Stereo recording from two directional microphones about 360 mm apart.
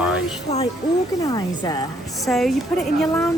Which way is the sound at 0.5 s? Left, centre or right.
Centre.